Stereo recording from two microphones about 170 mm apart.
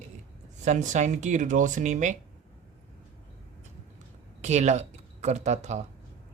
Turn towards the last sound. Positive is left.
turn(degrees=-45)  # may be behind; listen again after turning